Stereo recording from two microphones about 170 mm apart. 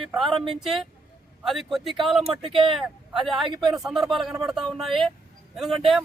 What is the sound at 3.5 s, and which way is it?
Speech, 30° right (ahead or behind).